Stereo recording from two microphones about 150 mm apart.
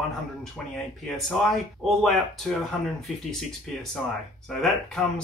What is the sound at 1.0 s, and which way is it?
Speech, centre (ahead or behind).